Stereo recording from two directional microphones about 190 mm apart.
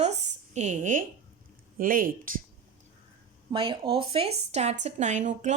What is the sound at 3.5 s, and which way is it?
Speech, 25° right (ahead or behind).